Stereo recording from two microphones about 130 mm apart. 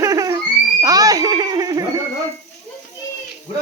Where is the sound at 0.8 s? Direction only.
30° right (ahead or behind).